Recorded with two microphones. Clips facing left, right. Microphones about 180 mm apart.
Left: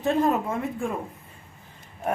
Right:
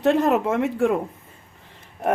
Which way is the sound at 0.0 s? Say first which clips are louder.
Right 4 dB; 80° right.